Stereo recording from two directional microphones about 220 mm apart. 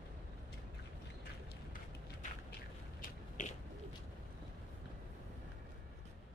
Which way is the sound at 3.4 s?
35° left (ahead or behind).